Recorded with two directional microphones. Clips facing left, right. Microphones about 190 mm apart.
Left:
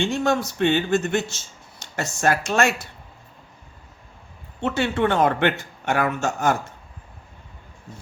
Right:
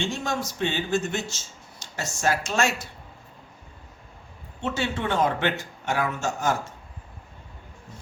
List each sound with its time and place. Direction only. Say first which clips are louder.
0.0 s speech: left 7 dB; 60° left (ahead or behind)
4.6 s speech: left 6 dB; 60° left (ahead or behind)